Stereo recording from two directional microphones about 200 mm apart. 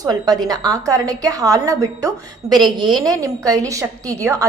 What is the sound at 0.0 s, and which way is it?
A woman's voice, 20° right (ahead or behind).